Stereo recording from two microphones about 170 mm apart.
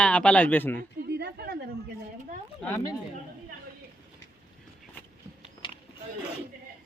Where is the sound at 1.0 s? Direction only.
75° right (ahead or behind).